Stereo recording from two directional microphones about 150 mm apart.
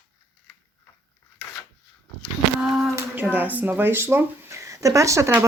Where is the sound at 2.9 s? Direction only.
10° right (ahead or behind).